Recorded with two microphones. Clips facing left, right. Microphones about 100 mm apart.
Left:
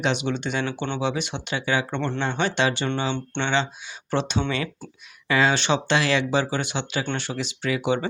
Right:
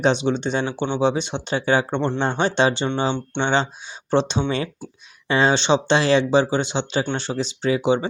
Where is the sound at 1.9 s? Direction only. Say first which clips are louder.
Right 5 dB; 25° right (ahead or behind).